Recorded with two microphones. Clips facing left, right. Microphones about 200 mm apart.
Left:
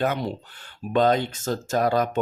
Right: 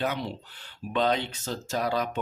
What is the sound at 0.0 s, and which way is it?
Speech, 50° left (ahead or behind).